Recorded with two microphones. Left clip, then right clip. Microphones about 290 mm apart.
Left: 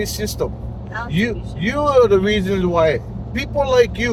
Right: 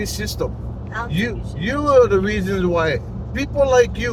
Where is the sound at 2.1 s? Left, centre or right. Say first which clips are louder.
Left 3 dB; centre.